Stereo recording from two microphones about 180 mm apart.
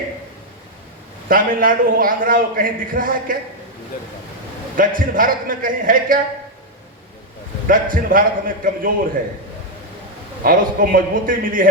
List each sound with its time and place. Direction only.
1.3 s a man's voice: 50° right (ahead or behind)
4.8 s a man's voice: 50° right (ahead or behind)
7.7 s a man's voice: 50° right (ahead or behind)
10.4 s a man's voice: 50° right (ahead or behind)